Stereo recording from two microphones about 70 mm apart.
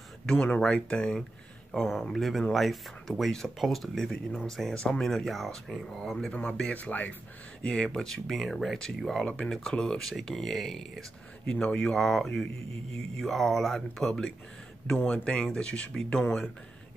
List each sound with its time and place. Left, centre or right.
0.3 s speech: centre
6.3 s speech: centre
7.6 s speech: centre
11.5 s speech: centre
11.9 s speech: centre